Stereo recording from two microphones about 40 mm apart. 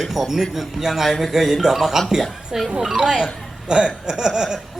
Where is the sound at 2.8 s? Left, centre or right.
Centre.